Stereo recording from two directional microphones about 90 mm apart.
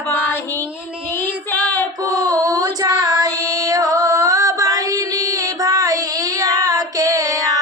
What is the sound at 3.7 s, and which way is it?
Female singing, 40° right (ahead or behind).